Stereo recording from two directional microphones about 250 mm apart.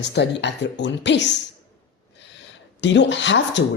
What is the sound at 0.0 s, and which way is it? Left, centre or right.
Speech, left.